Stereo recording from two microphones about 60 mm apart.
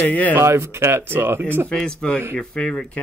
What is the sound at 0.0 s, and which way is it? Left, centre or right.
Speech, left.